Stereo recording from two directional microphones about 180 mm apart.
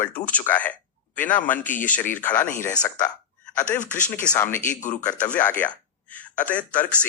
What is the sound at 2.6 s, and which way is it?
Speech, 20° left (ahead or behind).